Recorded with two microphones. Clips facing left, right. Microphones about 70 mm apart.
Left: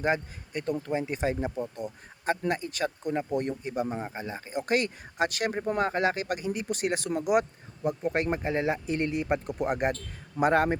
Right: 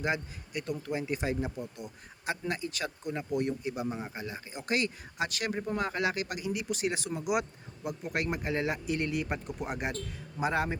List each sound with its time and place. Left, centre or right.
0.0 s speech: left
4.5 s speech: left
7.9 s speech: left
9.5 s speech: left